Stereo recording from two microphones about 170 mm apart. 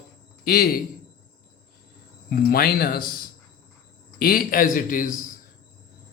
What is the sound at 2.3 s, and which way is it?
Speech, 60° left (ahead or behind).